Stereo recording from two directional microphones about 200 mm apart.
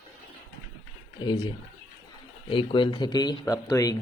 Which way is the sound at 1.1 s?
20° left (ahead or behind).